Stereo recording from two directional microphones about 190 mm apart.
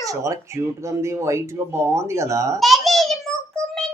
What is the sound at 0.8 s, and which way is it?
Speech, 15° right (ahead or behind).